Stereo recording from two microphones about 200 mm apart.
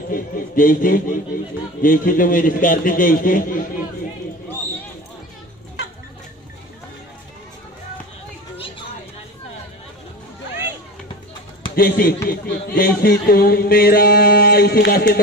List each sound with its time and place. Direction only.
0.1 s a man's voice: 45° left (ahead or behind)
11.7 s a man's voice: 45° left (ahead or behind)